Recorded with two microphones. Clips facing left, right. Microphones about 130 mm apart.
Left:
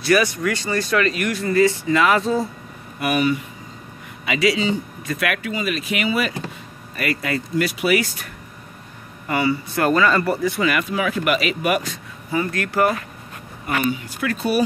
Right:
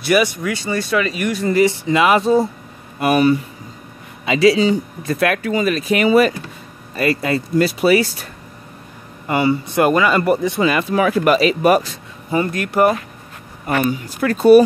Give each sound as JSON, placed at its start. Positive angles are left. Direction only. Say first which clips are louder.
{"t": 0.0, "sound": "speech", "louder": "right 2 dB", "side_deg": -15}
{"t": 3.0, "sound": "speech", "louder": "right 6 dB", "side_deg": -35}
{"t": 7.0, "sound": "speech", "louder": "right 6 dB", "side_deg": -30}
{"t": 9.3, "sound": "speech", "louder": "right 4 dB", "side_deg": -25}
{"t": 10.9, "sound": "speech", "louder": "right 6 dB", "side_deg": -40}
{"t": 12.4, "sound": "speech", "louder": "right 4 dB", "side_deg": -15}
{"t": 13.7, "sound": "speech", "louder": "right 4 dB", "side_deg": -40}